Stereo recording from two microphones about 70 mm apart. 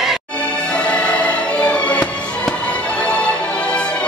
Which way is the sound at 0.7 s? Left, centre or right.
Centre.